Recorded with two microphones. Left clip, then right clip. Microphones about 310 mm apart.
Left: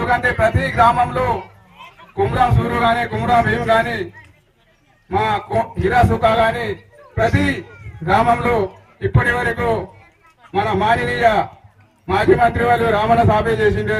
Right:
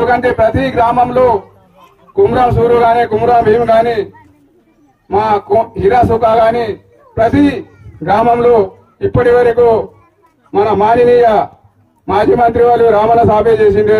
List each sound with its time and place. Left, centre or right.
0.0 s a man's voice: right
5.1 s a man's voice: right